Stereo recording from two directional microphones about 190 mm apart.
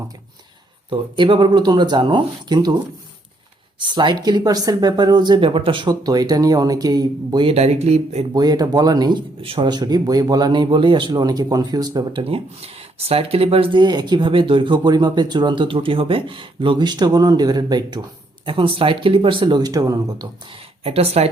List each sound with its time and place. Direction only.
0.9 s speech: 25° right (ahead or behind)
3.8 s speech: 25° right (ahead or behind)
8.3 s speech: 20° right (ahead or behind)